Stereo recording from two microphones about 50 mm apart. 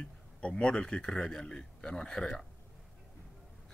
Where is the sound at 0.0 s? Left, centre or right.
Left.